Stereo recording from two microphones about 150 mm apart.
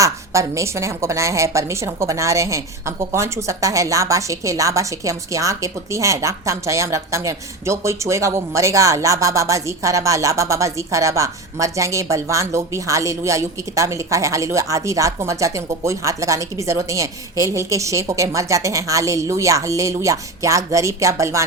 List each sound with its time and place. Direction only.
0.0 s a woman's voice: 20° right (ahead or behind)